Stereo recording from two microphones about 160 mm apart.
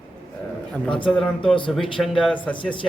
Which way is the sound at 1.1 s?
5° left (ahead or behind).